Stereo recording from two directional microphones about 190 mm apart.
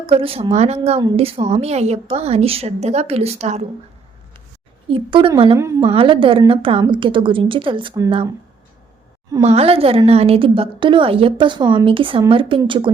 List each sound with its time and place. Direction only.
0.0 s a woman's voice: 30° right (ahead or behind)
4.9 s a woman's voice: 30° right (ahead or behind)
5.5 s a woman's voice: 15° right (ahead or behind)
5.9 s a woman's voice: 30° right (ahead or behind)
9.4 s a woman's voice: 30° right (ahead or behind)